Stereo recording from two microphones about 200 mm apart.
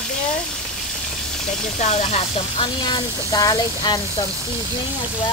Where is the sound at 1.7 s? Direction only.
35° left (ahead or behind).